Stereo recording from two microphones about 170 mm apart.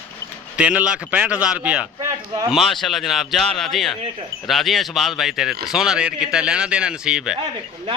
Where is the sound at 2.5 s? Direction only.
Centre (ahead or behind).